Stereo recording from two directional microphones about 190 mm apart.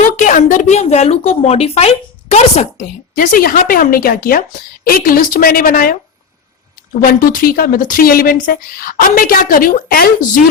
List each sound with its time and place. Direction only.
0.0 s a woman's voice: 40° left (ahead or behind)
7.0 s a woman's voice: 50° left (ahead or behind)